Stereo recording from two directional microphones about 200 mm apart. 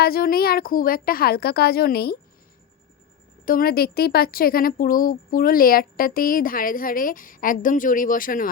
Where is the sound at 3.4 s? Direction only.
45° left (ahead or behind).